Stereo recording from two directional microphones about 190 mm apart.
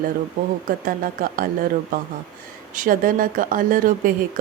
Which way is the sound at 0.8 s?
50° right (ahead or behind).